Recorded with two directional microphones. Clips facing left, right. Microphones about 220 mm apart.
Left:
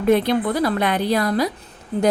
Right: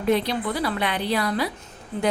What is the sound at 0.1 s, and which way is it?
Speech, 50° left (ahead or behind).